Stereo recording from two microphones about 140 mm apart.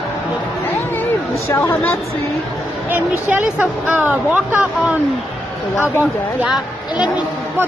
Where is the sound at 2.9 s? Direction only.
15° right (ahead or behind).